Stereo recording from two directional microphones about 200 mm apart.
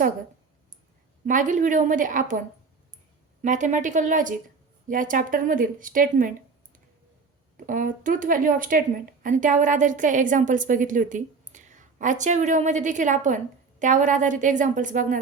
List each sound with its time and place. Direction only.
1.2 s a woman's voice: 40° right (ahead or behind)
3.4 s a woman's voice: 40° right (ahead or behind)
7.5 s a woman's voice: 40° right (ahead or behind)